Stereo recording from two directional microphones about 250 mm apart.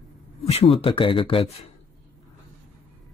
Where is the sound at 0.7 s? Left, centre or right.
Left.